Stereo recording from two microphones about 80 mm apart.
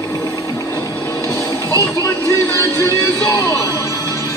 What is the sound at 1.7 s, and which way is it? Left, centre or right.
Music, left.